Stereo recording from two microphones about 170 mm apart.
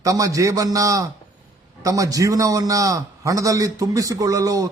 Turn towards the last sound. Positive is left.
turn(degrees=-20)  # may be behind; listen again after turning